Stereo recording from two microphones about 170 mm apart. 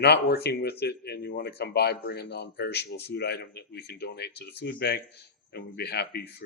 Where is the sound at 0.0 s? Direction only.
75° left (ahead or behind).